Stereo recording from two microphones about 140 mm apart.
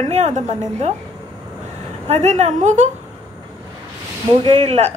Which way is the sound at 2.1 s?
50° right (ahead or behind).